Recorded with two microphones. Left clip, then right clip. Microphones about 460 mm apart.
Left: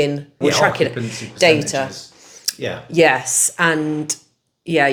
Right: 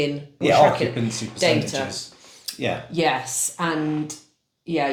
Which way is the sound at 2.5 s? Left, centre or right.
Left.